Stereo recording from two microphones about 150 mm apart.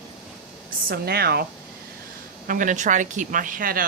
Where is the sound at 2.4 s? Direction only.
65° right (ahead or behind).